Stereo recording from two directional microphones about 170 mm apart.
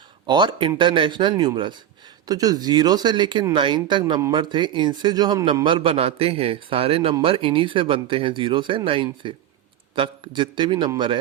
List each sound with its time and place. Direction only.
0.3 s a man's voice: 25° right (ahead or behind)